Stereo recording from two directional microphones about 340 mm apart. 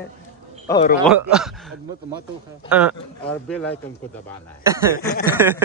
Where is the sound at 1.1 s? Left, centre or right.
Centre.